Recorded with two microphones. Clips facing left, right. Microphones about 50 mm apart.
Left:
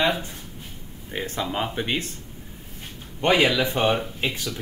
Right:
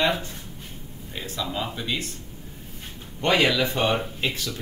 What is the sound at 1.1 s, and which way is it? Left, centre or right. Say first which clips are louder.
Speech: left 3 dB; left.